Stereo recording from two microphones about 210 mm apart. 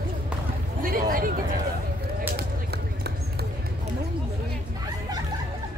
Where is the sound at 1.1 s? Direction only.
40° right (ahead or behind).